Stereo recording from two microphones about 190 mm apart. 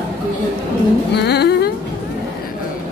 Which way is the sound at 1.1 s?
60° left (ahead or behind).